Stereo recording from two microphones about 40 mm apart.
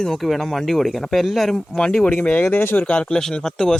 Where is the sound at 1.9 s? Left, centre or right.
Left.